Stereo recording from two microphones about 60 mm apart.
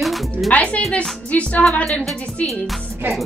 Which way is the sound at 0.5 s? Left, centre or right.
Left.